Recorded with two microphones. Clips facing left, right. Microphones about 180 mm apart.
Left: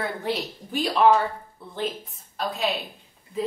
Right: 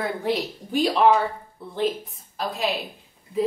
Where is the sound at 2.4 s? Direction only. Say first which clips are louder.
Right 1 dB; centre (ahead or behind).